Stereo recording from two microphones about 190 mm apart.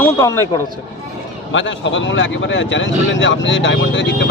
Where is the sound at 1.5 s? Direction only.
80° left.